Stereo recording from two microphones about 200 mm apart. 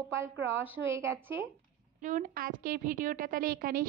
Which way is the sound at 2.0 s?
45° right (ahead or behind).